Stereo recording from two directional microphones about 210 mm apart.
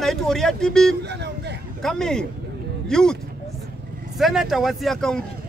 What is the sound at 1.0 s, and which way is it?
Vehicle, 55° right (ahead or behind).